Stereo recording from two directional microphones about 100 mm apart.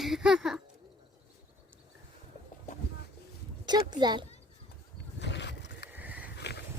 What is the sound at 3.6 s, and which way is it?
Speech, 45° right (ahead or behind).